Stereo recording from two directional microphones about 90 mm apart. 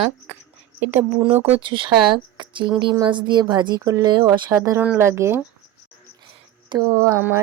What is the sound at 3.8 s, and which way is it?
Speech, 40° right (ahead or behind).